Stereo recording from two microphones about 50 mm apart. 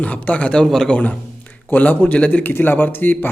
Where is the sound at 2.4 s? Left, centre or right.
Left.